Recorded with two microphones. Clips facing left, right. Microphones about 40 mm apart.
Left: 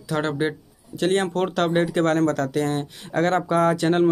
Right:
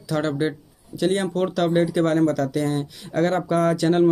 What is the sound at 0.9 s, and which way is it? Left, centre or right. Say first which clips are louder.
Speech: even; left.